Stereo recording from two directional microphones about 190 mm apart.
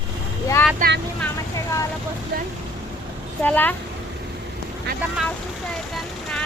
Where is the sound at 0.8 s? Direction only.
55° right (ahead or behind).